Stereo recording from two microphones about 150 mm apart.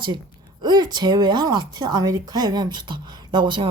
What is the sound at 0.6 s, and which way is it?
Speech, 30° right (ahead or behind).